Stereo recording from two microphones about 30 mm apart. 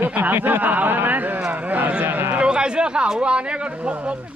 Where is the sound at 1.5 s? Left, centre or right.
Right.